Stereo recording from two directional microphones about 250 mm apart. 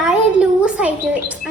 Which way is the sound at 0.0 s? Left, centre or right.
Centre.